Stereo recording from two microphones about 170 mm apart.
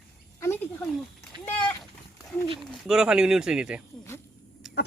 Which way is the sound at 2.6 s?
5° right (ahead or behind).